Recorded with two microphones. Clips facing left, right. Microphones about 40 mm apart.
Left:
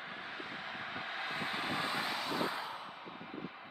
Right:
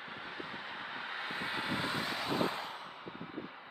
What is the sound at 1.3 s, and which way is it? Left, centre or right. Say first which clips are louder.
Vehicle: right 1 dB; centre.